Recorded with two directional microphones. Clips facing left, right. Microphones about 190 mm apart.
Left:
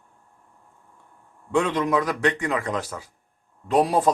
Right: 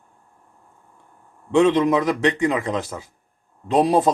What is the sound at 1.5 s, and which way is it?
A man's voice, 25° right (ahead or behind).